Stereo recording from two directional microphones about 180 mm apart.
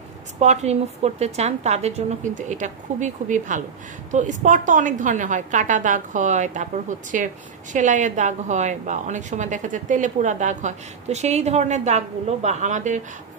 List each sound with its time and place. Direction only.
0.4 s a woman's voice: 40° right (ahead or behind)